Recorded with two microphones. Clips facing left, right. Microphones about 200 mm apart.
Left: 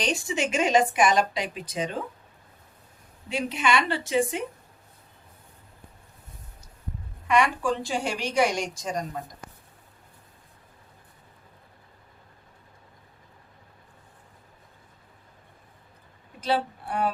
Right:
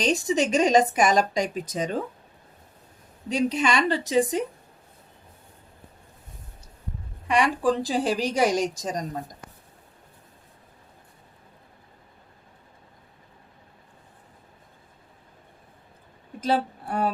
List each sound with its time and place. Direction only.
0.0 s speech: 40° right (ahead or behind)
3.2 s speech: 40° right (ahead or behind)
7.3 s speech: 35° right (ahead or behind)
16.4 s speech: 45° right (ahead or behind)